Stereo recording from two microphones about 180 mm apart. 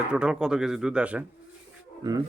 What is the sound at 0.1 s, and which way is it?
Speech, 5° right (ahead or behind).